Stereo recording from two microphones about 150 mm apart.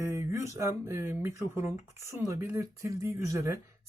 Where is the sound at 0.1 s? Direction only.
20° right (ahead or behind).